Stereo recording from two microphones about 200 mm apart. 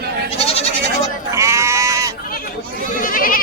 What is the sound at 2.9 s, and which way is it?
Goat, 45° left (ahead or behind).